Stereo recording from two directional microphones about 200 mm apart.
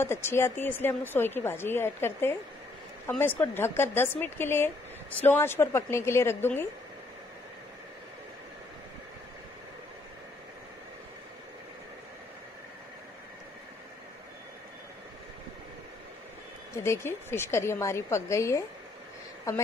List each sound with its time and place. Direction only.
0.0 s a woman's voice: 10° left (ahead or behind)
16.7 s a woman's voice: 15° left (ahead or behind)